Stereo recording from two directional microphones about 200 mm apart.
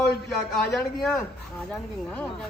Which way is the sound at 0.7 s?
5° left (ahead or behind).